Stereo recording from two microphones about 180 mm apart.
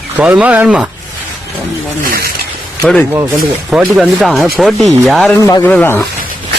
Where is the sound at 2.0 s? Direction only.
55° right (ahead or behind).